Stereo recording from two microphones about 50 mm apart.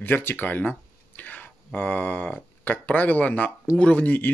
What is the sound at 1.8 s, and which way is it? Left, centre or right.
Speech, left.